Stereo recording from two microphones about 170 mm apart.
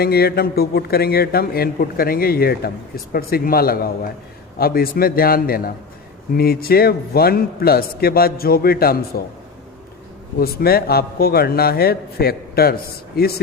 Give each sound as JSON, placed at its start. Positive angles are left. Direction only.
{"t": 0.0, "sound": "a man's voice", "side_deg": 65}
{"t": 10.4, "sound": "a man's voice", "side_deg": 65}